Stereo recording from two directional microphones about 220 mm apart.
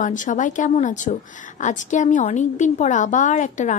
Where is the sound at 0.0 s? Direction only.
35° left (ahead or behind).